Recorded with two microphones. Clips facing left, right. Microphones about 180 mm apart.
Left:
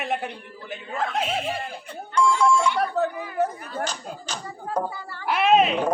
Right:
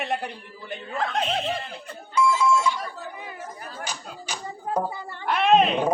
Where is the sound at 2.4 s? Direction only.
65° left (ahead or behind).